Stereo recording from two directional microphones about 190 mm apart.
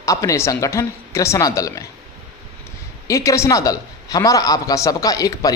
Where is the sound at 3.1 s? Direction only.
15° left (ahead or behind).